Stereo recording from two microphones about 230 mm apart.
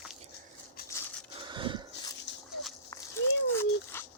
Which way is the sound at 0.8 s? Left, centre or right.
Centre.